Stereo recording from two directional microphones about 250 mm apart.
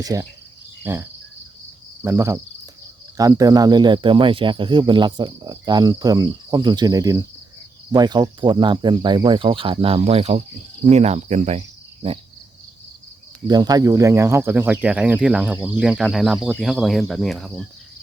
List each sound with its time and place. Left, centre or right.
0.0 s speech: centre
2.0 s cricket: centre
3.2 s speech: centre
13.5 s speech: centre